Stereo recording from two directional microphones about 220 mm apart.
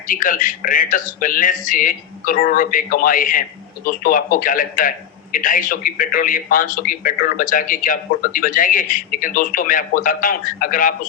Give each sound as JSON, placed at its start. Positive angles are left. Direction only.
{"t": 0.1, "sound": "a man's voice", "side_deg": 40}